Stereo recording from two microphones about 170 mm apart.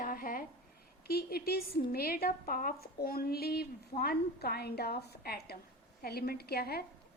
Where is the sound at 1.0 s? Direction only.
65° left (ahead or behind).